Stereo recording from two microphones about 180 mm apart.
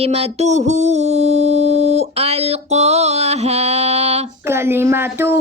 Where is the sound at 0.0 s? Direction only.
35° right (ahead or behind).